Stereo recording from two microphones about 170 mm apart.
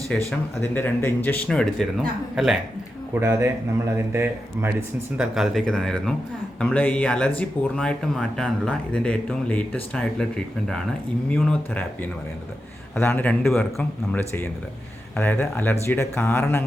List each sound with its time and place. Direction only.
0.1 s speech: 10° left (ahead or behind)
3.2 s speech: 15° right (ahead or behind); by 11.8 s 5° left (ahead or behind)
13.0 s speech: 10° left (ahead or behind)